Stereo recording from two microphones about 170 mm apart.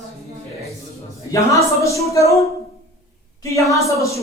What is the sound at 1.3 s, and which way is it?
Speech, 20° left (ahead or behind).